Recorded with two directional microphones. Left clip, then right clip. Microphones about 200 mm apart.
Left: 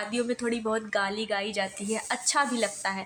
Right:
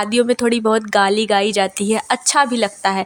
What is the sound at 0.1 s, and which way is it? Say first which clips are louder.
Speech: right 14 dB; 45° right (ahead or behind).